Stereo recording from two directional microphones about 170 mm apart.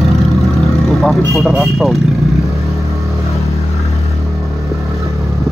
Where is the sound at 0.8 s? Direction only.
Centre (ahead or behind).